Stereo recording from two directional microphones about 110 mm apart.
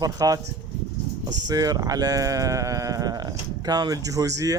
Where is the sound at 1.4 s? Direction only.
35° right (ahead or behind).